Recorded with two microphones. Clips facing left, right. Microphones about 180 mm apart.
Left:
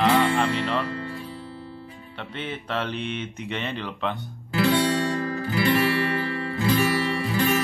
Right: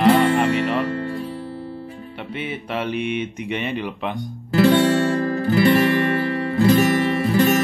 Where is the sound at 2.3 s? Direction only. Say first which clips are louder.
Right 3 dB; 10° right (ahead or behind).